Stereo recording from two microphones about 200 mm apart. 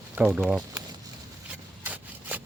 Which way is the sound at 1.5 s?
10° right (ahead or behind).